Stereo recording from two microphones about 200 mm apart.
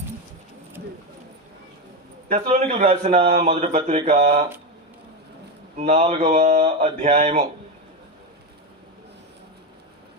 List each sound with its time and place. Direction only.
2.3 s a man's voice: 35° right (ahead or behind)
5.7 s a man's voice: 35° right (ahead or behind)